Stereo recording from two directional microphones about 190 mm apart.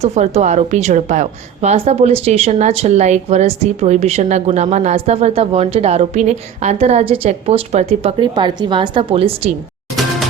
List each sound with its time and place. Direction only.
0.0 s a woman's voice: 35° right (ahead or behind)